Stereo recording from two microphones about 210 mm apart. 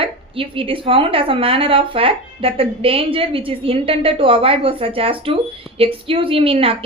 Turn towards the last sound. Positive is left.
turn(degrees=-25)  # may be behind; listen again after turning